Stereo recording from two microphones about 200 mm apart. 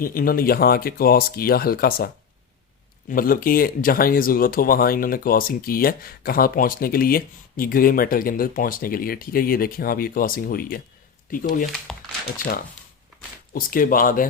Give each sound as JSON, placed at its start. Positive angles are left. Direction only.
{"t": 0.0, "sound": "speech", "side_deg": 45}
{"t": 3.1, "sound": "speech", "side_deg": 45}
{"t": 11.9, "sound": "speech", "side_deg": 5}
{"t": 13.5, "sound": "speech", "side_deg": 45}